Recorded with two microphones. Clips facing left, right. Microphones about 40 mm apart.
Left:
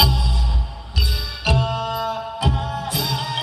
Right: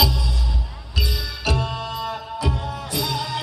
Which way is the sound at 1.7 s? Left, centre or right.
Left.